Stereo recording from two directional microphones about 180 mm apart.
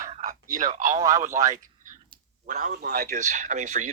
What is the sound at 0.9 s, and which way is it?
Speech, 20° right (ahead or behind).